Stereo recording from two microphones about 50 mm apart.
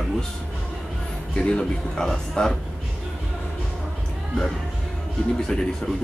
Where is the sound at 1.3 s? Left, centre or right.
Centre.